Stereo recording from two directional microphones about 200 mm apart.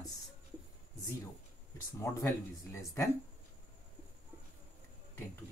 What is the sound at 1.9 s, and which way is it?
Speech, 15° left (ahead or behind).